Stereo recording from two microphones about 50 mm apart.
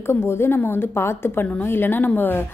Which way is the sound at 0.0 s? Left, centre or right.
Left.